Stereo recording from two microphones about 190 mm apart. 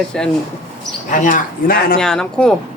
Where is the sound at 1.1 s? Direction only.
45° left (ahead or behind).